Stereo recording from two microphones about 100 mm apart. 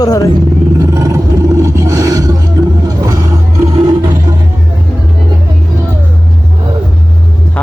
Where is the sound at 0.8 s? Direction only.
35° right (ahead or behind).